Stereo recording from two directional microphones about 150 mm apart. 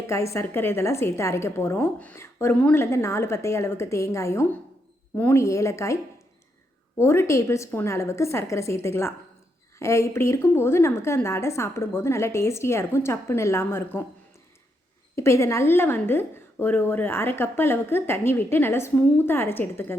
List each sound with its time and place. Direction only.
0.1 s a woman's voice: 20° left (ahead or behind)
15.1 s a woman's voice: 20° left (ahead or behind)